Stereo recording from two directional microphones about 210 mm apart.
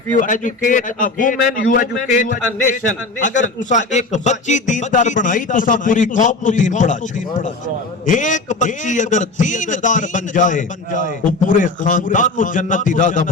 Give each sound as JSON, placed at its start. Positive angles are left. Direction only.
{"t": 0.2, "sound": "a man's voice", "side_deg": 40}